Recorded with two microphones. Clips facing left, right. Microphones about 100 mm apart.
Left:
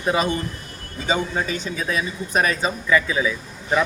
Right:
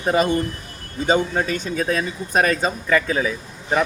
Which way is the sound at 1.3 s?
50° right (ahead or behind).